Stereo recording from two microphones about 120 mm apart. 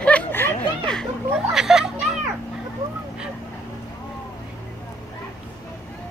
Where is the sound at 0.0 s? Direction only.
15° left (ahead or behind).